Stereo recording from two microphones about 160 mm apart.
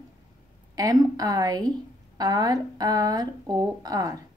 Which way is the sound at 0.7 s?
25° right (ahead or behind).